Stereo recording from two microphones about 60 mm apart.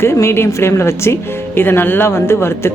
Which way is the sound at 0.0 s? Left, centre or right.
Left.